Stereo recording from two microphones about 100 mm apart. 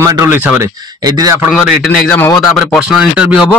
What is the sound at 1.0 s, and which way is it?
Speech, 40° right (ahead or behind).